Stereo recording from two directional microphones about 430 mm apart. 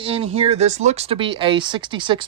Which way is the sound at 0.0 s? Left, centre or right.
Centre.